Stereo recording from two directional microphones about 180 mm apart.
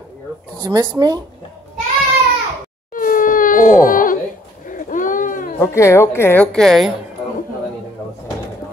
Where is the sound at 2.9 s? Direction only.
50° left (ahead or behind).